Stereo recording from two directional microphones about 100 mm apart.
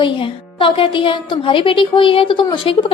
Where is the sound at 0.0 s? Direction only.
60° left (ahead or behind).